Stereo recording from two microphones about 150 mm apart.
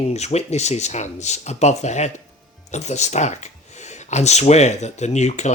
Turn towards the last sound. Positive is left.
turn(degrees=50)  # may be behind; listen again after turning